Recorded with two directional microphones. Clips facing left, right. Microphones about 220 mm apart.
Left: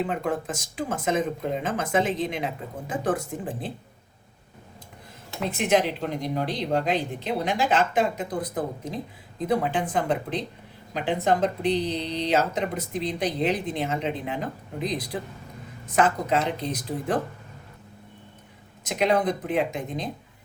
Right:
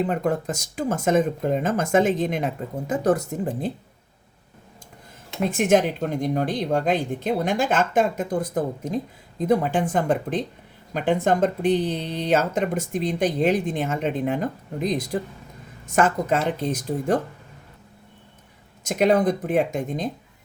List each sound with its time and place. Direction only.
0.0 s speech: 40° right (ahead or behind)
5.5 s speech: 50° right (ahead or behind)
18.9 s speech: 45° right (ahead or behind)